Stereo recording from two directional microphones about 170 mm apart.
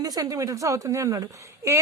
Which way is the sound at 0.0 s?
20° right (ahead or behind).